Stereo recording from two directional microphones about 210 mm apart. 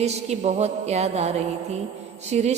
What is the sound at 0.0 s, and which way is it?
Mantra, 30° right (ahead or behind).